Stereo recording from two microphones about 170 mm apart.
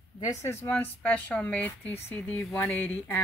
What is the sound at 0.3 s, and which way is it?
Speech, 15° left (ahead or behind).